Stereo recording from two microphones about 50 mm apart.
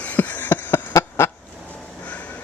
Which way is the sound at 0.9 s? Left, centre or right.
Left.